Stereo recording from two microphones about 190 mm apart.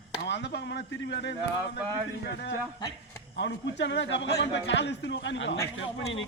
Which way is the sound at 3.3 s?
70° left (ahead or behind).